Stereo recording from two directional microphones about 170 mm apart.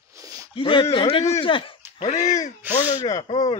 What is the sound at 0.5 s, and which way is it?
Speech, 30° left (ahead or behind).